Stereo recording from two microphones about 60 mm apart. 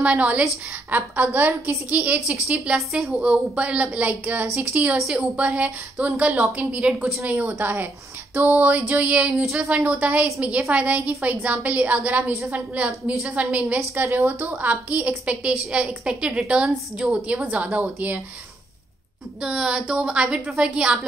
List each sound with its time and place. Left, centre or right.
0.0 s a woman's voice: right
2.9 s a woman's voice: centre
3.3 s a woman's voice: right
9.4 s a woman's voice: centre
9.7 s a woman's voice: right
14.0 s a woman's voice: right
19.4 s a woman's voice: centre